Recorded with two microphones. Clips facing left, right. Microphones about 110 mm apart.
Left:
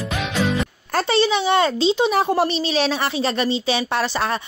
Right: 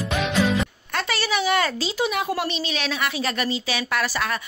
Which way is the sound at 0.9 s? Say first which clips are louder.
Left 6 dB; 25° left (ahead or behind).